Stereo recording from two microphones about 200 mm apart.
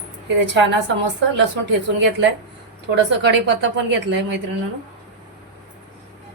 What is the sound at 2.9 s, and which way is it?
A woman's voice, 60° right (ahead or behind).